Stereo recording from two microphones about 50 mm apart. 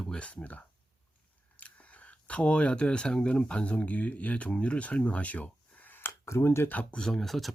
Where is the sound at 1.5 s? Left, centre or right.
Left.